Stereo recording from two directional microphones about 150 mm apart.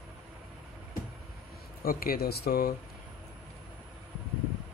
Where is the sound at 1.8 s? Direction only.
75° left (ahead or behind).